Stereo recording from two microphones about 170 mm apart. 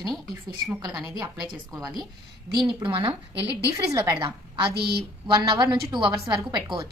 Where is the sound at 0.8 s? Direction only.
20° right (ahead or behind).